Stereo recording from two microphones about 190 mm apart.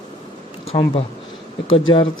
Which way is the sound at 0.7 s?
30° left (ahead or behind).